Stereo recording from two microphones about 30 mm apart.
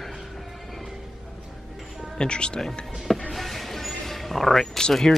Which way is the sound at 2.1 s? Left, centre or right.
Left.